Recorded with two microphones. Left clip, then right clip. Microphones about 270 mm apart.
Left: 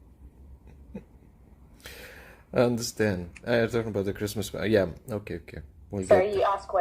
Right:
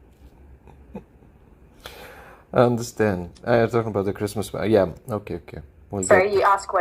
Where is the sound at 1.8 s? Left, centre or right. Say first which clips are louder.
Right 4 dB; centre.